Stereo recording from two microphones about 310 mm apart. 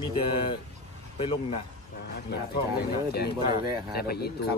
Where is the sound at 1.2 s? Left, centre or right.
Centre.